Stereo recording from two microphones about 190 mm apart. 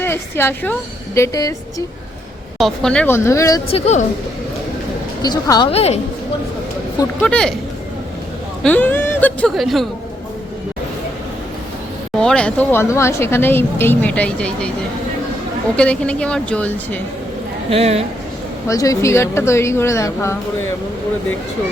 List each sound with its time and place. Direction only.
0.0 s speech: 10° left (ahead or behind)
2.6 s speech: centre (ahead or behind)
3.7 s a woman's voice: 35° left (ahead or behind)
5.2 s a woman's voice: 20° left (ahead or behind)
7.2 s speech: 5° left (ahead or behind)
8.6 s speech: 10° left (ahead or behind)
12.1 s speech: 5° left (ahead or behind)
15.7 s speech: 5° left (ahead or behind)
17.7 s speech: 30° right (ahead or behind)
18.7 s speech: 15° left (ahead or behind)